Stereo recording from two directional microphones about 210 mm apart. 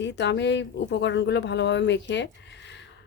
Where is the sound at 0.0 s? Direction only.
55° left (ahead or behind).